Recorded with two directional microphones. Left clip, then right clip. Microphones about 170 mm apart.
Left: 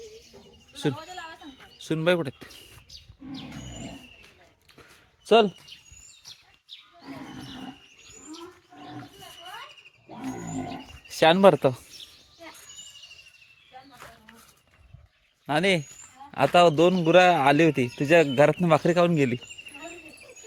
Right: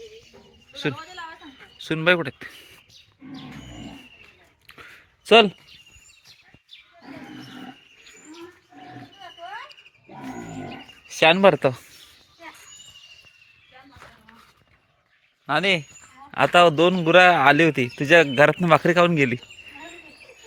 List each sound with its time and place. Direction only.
0.9 s a sound: 90° left
1.5 s speech: 10° left (ahead or behind)
4.7 s a sound: 5° left (ahead or behind)
5.2 s speech: 10° right (ahead or behind)
11.1 s speech: 15° left (ahead or behind)
15.4 s speech: 30° left (ahead or behind)
16.3 s a man's voice: 5° left (ahead or behind)